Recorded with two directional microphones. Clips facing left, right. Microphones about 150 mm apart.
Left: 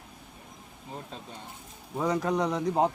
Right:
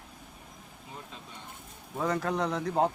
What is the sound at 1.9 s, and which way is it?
Speech, 15° left (ahead or behind).